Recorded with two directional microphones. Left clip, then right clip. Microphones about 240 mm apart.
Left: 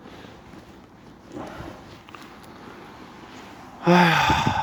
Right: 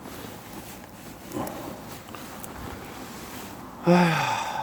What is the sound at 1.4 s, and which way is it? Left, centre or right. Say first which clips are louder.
Dog: right 4 dB; centre.